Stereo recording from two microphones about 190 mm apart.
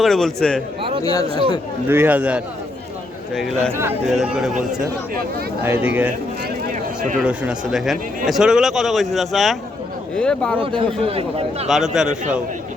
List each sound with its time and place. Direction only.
0.0 s a man's voice: centre (ahead or behind)
1.0 s speech: 20° left (ahead or behind)
1.9 s a man's voice: 10° right (ahead or behind)
3.7 s a man's voice: 10° right (ahead or behind)
5.6 s speech: 10° right (ahead or behind)
7.2 s a man's voice: 5° right (ahead or behind)
10.8 s a man's voice: 30° right (ahead or behind)
11.7 s a man's voice: centre (ahead or behind)